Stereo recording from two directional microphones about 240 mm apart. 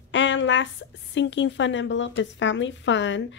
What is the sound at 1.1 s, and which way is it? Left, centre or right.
Speech, left.